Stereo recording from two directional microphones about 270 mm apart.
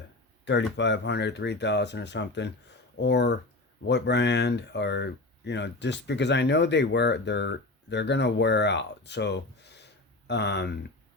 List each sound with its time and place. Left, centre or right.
0.4 s speech: left